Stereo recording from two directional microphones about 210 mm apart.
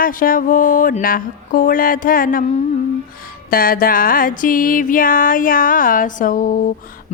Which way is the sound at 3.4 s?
45° left (ahead or behind).